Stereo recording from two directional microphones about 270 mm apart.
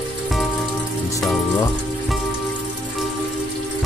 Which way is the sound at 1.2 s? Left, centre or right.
Centre.